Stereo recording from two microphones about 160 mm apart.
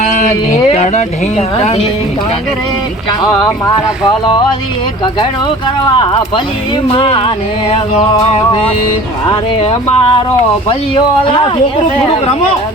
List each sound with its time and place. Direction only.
0.0 s speech: 50° left (ahead or behind)
3.1 s speech: 25° left (ahead or behind)
5.2 s speech: 30° left (ahead or behind)
9.3 s speech: 40° left (ahead or behind)